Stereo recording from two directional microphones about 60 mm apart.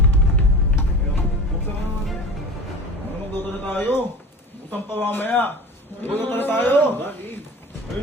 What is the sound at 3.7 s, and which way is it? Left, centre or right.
Speech, left.